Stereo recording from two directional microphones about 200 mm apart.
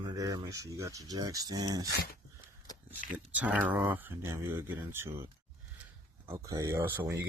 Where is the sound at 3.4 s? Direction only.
5° right (ahead or behind).